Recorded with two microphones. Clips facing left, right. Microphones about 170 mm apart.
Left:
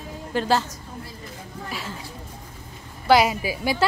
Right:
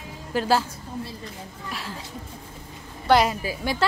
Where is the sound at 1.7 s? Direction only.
Centre (ahead or behind).